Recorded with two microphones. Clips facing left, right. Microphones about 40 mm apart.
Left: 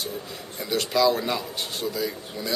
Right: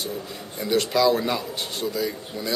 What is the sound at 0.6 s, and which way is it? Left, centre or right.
A man's voice, centre.